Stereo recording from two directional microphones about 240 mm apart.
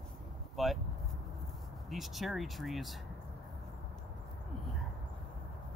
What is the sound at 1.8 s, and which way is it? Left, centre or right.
Speech, centre.